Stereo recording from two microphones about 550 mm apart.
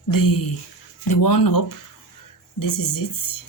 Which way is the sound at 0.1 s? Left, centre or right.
Left.